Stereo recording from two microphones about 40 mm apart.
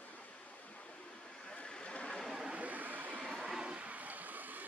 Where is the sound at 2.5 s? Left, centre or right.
Right.